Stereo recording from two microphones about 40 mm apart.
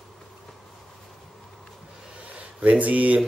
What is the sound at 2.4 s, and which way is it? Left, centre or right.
Speech, right.